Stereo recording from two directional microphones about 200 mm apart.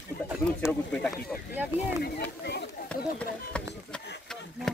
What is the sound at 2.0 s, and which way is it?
Speech, 55° left (ahead or behind).